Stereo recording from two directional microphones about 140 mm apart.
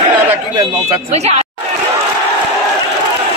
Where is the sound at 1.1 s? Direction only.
50° right (ahead or behind).